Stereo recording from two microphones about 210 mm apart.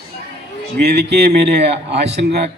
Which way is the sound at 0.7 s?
50° right (ahead or behind).